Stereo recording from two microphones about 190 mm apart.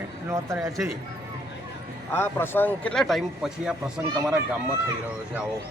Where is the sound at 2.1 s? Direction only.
10° left (ahead or behind).